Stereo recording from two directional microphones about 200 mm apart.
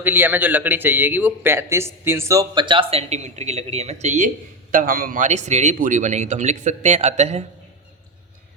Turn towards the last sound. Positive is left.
turn(degrees=-35)  # may be behind; listen again after turning